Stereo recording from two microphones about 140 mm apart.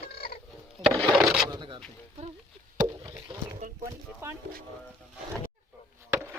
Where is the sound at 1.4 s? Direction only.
35° right (ahead or behind).